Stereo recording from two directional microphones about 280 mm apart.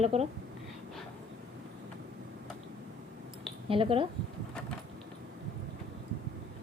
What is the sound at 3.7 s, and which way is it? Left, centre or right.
Speech, centre.